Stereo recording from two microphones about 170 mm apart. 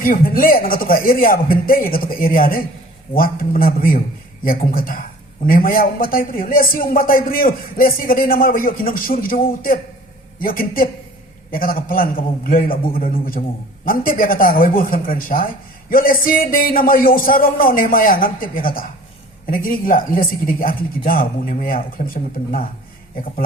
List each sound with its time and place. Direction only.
0.0 s a man's voice: 55° left (ahead or behind)
13.8 s speech: 55° left (ahead or behind)